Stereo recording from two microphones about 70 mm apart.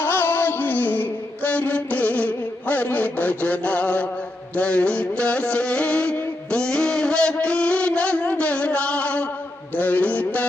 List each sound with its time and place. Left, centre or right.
0.0 s music: left
6.5 s a sound: centre
7.3 s music: centre